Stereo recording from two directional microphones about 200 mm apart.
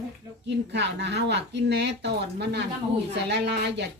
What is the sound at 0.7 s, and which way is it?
Speech, 60° right (ahead or behind).